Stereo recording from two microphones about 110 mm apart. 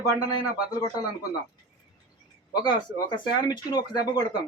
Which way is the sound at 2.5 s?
40° left (ahead or behind).